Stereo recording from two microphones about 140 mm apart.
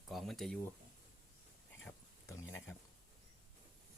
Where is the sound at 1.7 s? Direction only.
20° left (ahead or behind).